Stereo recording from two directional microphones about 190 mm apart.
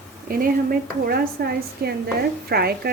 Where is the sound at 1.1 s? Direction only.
55° right (ahead or behind).